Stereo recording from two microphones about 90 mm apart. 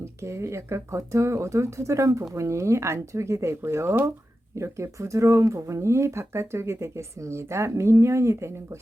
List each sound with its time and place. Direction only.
0.0 s speech: 30° right (ahead or behind)